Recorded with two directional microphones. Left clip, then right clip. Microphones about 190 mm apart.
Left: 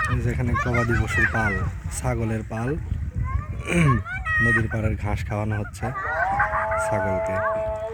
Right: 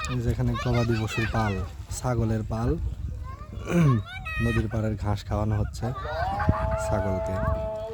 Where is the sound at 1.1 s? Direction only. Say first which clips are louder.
Left 9 dB; 40° right (ahead or behind).